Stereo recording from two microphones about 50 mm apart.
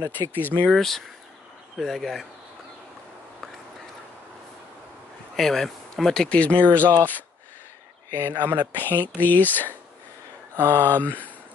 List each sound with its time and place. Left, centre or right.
0.0 s speech: left
0.7 s speech: centre
5.3 s speech: centre
6.2 s speech: left
8.1 s speech: right
8.8 s speech: left
10.6 s speech: right
11.1 s speech: left